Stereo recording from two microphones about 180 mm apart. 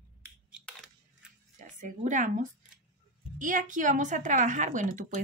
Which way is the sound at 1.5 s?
45° right (ahead or behind).